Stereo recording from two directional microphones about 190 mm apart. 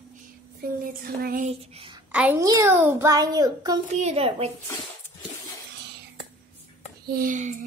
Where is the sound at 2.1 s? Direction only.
10° right (ahead or behind).